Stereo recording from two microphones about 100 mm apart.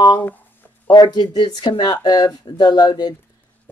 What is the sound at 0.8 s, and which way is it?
Speech, 50° left (ahead or behind).